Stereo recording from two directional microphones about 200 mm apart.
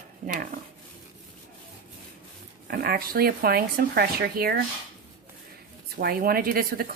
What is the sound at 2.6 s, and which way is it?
Speech, 50° right (ahead or behind).